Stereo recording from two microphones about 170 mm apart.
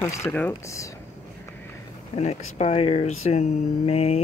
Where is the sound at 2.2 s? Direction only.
40° left (ahead or behind).